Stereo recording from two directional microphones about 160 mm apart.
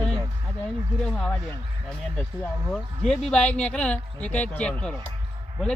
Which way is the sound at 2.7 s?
5° left (ahead or behind).